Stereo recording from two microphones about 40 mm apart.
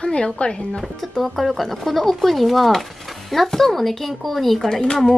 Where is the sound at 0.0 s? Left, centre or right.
Left.